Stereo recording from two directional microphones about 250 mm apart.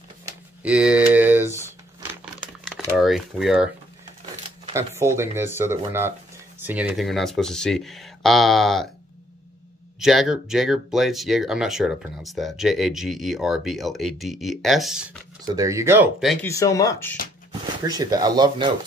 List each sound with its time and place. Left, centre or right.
0.2 s a sound: centre
3.0 s speech: centre
4.7 s speech: centre
9.9 s speech: centre
15.4 s speech: centre
16.4 s speech: centre
17.5 s speech: centre